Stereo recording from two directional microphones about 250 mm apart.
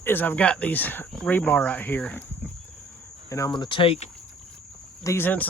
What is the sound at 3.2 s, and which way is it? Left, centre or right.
Speech, centre.